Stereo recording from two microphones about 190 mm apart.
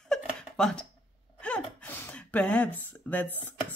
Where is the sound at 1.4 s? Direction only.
5° left (ahead or behind).